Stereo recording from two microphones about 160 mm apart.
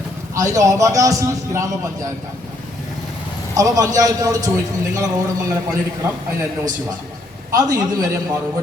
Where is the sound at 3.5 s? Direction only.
20° right (ahead or behind).